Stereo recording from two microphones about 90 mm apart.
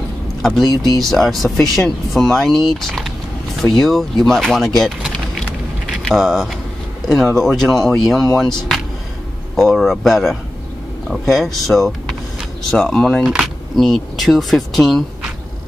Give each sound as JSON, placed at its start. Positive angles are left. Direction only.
{"t": 0.4, "sound": "speech", "side_deg": 0}
{"t": 13.2, "sound": "speech", "side_deg": -5}